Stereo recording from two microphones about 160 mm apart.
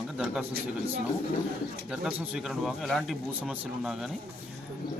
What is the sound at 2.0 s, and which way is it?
Speech, centre (ahead or behind).